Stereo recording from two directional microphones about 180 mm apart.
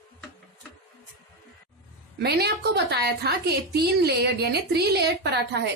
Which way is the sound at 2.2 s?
65° right (ahead or behind).